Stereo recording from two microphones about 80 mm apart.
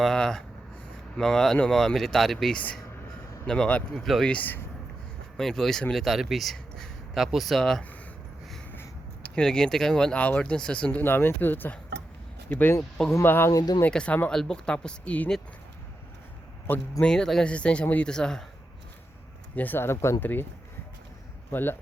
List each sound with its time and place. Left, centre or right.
0.0 s speech: centre
3.9 s speech: centre
4.3 s speech: left
5.4 s speech: centre
8.7 s a sound: left
9.3 s speech: centre
11.0 s speech: left
13.5 s speech: left
13.9 s speech: centre
17.0 s speech: centre
19.5 s speech: left
21.5 s speech: left